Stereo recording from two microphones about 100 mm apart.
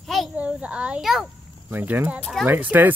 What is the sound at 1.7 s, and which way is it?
A child's voice, 20° right (ahead or behind).